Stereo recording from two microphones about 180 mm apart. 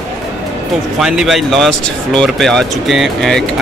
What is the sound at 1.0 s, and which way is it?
Speech, 5° right (ahead or behind).